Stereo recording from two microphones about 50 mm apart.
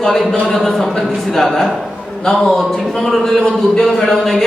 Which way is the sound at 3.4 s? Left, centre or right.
Centre.